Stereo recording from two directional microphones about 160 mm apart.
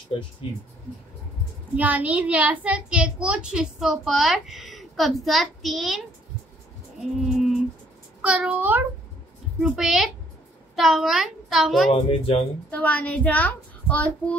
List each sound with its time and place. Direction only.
1.8 s a child's voice: 10° right (ahead or behind)
11.9 s speech: 35° left (ahead or behind)
12.7 s a woman's voice: 10° left (ahead or behind)